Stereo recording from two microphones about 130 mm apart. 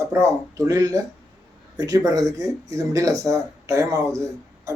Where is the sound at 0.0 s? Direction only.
25° right (ahead or behind).